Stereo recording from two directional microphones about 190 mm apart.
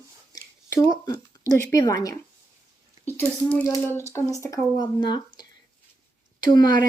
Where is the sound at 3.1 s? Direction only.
10° left (ahead or behind).